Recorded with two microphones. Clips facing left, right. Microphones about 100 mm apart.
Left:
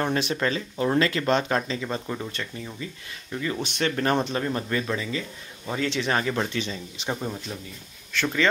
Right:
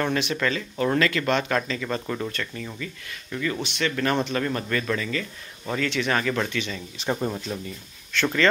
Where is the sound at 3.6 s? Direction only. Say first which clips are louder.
Left 3 dB; 40° left (ahead or behind).